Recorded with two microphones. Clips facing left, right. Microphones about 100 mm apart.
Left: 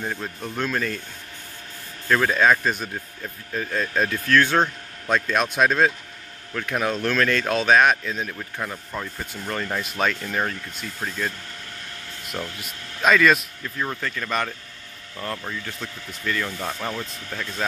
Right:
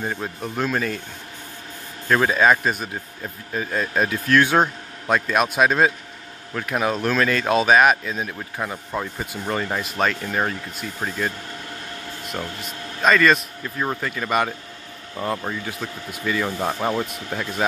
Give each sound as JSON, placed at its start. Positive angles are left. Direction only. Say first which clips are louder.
{"t": 0.0, "sound": "speech", "louder": "right 2 dB", "side_deg": -5}
{"t": 2.0, "sound": "speech", "louder": "right 2 dB", "side_deg": -10}
{"t": 12.4, "sound": "a man's voice", "louder": "right 1 dB", "side_deg": -5}
{"t": 13.7, "sound": "speech", "louder": "right 3 dB", "side_deg": -15}
{"t": 15.1, "sound": "speech", "louder": "right 5 dB", "side_deg": -25}
{"t": 15.6, "sound": "speech", "louder": "right 4 dB", "side_deg": -10}
{"t": 16.4, "sound": "speech", "louder": "right 6 dB", "side_deg": -30}